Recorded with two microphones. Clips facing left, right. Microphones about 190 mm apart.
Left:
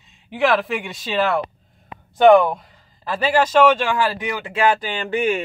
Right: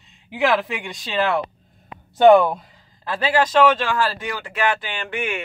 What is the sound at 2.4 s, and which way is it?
A man's voice, 10° left (ahead or behind).